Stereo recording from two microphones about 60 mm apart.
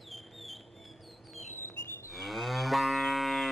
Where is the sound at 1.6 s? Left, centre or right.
Left.